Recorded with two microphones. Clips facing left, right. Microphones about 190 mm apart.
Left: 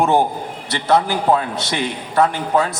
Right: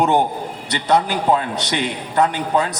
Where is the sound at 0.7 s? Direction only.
15° right (ahead or behind).